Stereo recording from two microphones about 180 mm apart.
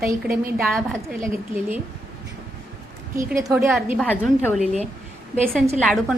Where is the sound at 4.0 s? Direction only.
10° left (ahead or behind).